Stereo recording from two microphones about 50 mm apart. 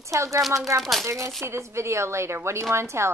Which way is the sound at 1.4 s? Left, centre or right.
Right.